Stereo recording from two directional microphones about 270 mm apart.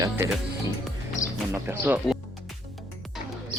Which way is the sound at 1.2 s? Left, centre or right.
Left.